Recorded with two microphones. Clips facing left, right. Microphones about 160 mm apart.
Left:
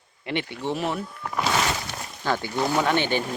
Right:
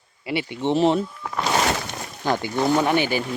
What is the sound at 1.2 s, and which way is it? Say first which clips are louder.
Speech: right 1 dB; 5° left (ahead or behind).